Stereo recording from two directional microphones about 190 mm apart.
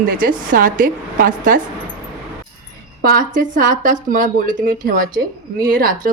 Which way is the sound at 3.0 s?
45° right (ahead or behind).